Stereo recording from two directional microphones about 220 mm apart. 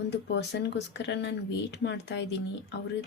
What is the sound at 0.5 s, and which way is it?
A woman's voice, 50° left (ahead or behind).